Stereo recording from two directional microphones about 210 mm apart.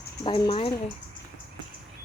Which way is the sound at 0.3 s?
25° left (ahead or behind).